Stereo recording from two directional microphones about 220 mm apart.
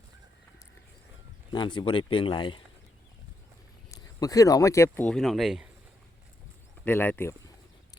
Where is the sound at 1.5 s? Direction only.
20° left (ahead or behind).